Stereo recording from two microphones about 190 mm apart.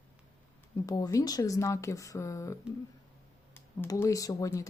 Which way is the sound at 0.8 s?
20° left (ahead or behind).